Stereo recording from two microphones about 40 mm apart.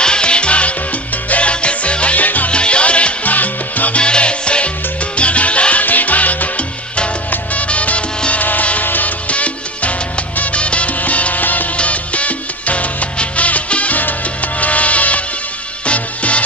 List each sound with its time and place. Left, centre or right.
0.0 s music: left
2.2 s salsa music: left
2.5 s music: left
3.3 s salsa music: left
4.0 s music: left
5.1 s salsa music: left
7.2 s music: left
8.3 s music: left
9.3 s music: left
11.7 s salsa music: left
14.6 s music: left